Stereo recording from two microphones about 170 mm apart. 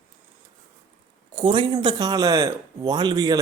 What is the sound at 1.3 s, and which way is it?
A man's voice, 30° right (ahead or behind).